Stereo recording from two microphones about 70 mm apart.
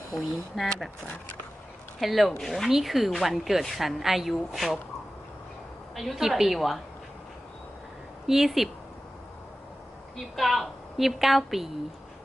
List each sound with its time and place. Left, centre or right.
0.1 s a woman's voice: centre
2.0 s a woman's voice: centre
6.0 s a woman's voice: centre
8.3 s a woman's voice: centre
10.2 s a woman's voice: centre